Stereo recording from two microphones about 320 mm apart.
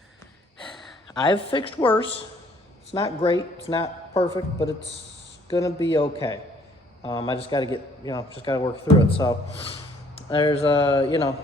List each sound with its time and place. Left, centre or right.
1.1 s a man's voice: centre